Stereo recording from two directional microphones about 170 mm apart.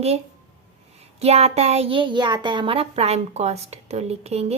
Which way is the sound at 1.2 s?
35° right (ahead or behind).